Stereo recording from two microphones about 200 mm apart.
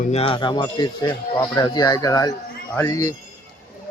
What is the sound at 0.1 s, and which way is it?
Speech, 30° left (ahead or behind).